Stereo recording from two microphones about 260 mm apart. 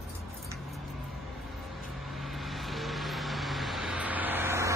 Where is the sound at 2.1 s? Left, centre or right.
Centre.